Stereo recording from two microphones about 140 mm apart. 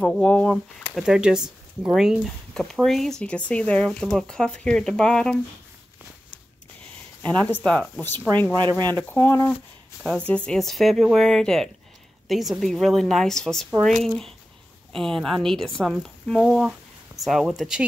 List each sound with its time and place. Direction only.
0.0 s speech: 5° left (ahead or behind)
7.2 s speech: 10° left (ahead or behind)
8.6 s speech: 30° right (ahead or behind)
8.9 s speech: 15° left (ahead or behind); by 17.8 s 5° right (ahead or behind)